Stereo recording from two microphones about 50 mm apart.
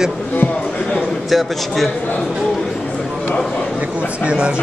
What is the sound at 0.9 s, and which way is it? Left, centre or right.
Speech, centre.